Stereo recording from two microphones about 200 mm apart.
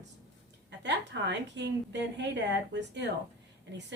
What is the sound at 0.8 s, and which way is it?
A woman's voice, 60° right (ahead or behind).